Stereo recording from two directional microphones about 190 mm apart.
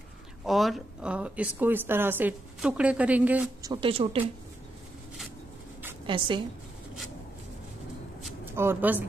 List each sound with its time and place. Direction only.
0.5 s speech: centre (ahead or behind)
3.6 s speech: 25° right (ahead or behind)
6.0 s speech: 25° right (ahead or behind)
8.5 s speech: 10° right (ahead or behind)